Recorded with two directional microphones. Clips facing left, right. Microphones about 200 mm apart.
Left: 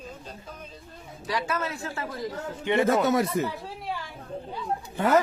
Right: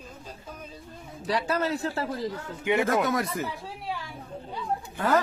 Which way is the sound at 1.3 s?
35° right (ahead or behind).